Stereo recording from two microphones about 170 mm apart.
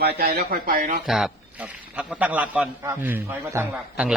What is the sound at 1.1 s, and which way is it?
A man's voice, centre (ahead or behind).